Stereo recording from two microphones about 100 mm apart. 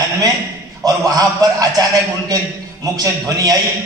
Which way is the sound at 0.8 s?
40° right (ahead or behind).